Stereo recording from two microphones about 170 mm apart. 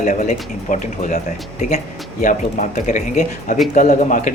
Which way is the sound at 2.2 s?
50° left (ahead or behind).